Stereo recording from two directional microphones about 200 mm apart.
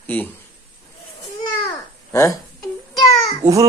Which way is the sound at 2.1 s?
15° left (ahead or behind).